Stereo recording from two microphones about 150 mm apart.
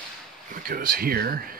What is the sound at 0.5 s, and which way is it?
Speech, 65° right (ahead or behind).